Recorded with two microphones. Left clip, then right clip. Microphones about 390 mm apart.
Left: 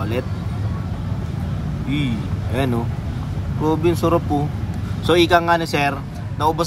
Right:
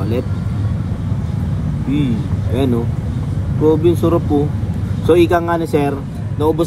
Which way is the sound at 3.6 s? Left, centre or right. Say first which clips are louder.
Right 5 dB; left.